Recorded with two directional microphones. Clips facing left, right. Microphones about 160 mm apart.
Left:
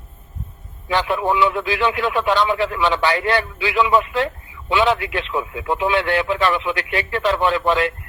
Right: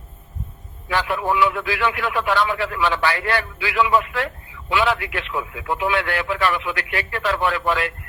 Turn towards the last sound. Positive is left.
turn(degrees=25)  # may be behind; listen again after turning